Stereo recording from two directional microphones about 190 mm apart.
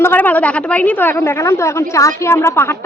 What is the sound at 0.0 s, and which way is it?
A woman's voice, 10° left (ahead or behind).